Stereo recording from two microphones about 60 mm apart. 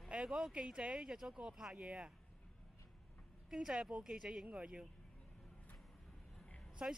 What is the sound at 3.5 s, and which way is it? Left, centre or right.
A woman's voice, centre.